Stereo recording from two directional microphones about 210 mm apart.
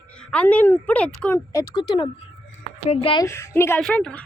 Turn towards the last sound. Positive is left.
turn(degrees=5)  # may be behind; listen again after turning